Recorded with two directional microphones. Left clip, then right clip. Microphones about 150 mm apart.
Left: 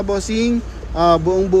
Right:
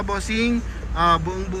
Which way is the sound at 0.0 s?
30° left (ahead or behind).